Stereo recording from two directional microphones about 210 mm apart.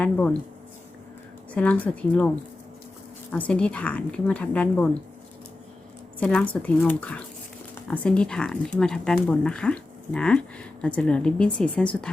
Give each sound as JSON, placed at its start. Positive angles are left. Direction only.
{"t": 0.0, "sound": "speech", "side_deg": 5}
{"t": 1.5, "sound": "speech", "side_deg": 5}
{"t": 3.3, "sound": "speech", "side_deg": 5}
{"t": 6.1, "sound": "speech", "side_deg": 5}